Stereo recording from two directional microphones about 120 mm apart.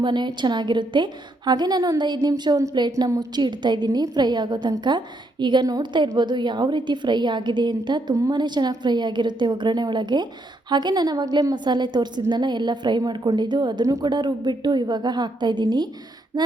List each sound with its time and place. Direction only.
0.0 s a woman's voice: 40° right (ahead or behind)